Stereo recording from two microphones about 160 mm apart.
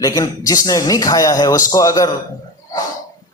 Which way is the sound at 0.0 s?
20° left (ahead or behind).